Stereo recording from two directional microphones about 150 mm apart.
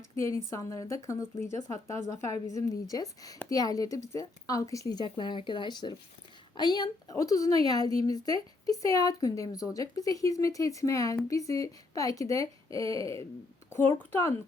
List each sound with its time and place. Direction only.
0.2 s a woman's voice: 20° left (ahead or behind)